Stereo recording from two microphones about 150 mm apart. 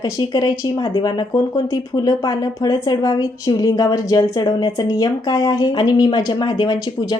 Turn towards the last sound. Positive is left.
turn(degrees=25)  # may be behind; listen again after turning